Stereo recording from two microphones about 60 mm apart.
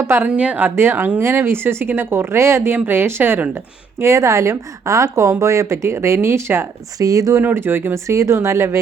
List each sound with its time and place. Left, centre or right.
0.2 s a woman's voice: right
2.7 s speech: right
4.0 s a woman's voice: right
7.0 s speech: right
7.4 s speech: right
8.0 s speech: right